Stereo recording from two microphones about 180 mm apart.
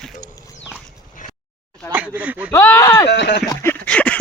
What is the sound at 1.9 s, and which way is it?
Speech, 10° right (ahead or behind).